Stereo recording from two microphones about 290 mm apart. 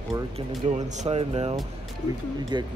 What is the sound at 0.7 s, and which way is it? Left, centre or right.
Speech, right.